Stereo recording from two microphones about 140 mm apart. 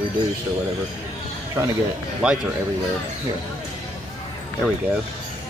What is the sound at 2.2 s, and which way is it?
Speech, 10° right (ahead or behind).